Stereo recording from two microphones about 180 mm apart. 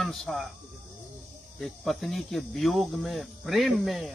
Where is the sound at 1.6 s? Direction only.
Centre (ahead or behind).